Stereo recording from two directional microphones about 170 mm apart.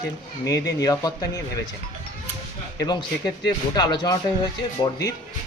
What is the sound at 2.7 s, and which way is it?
Speech, 20° left (ahead or behind).